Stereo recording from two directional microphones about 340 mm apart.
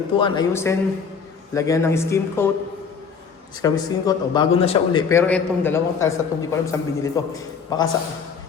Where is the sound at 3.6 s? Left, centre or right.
Centre.